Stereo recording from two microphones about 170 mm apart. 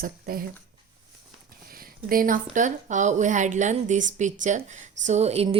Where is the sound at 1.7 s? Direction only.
60° right (ahead or behind).